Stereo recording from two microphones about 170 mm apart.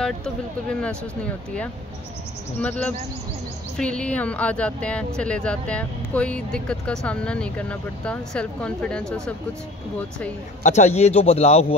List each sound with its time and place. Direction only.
0.0 s speech: 5° left (ahead or behind)
3.7 s speech: 5° left (ahead or behind)
10.6 s speech: 45° left (ahead or behind)